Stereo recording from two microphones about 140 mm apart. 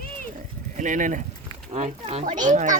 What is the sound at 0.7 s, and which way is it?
Speech, 65° right (ahead or behind).